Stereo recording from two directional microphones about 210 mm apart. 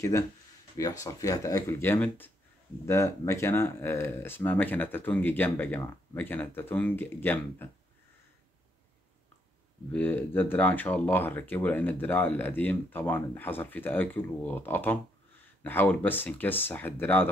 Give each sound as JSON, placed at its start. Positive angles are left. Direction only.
{"t": 0.7, "sound": "speech", "side_deg": 15}
{"t": 9.9, "sound": "speech", "side_deg": 10}